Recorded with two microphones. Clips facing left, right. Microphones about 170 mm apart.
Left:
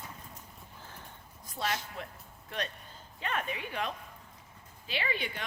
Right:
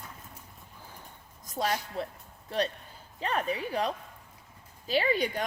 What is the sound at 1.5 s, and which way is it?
Speech, 40° right (ahead or behind).